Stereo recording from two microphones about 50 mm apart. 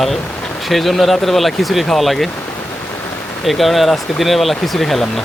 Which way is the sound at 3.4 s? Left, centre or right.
Centre.